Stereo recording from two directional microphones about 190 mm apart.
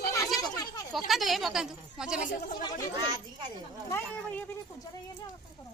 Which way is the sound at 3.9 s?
10° left (ahead or behind).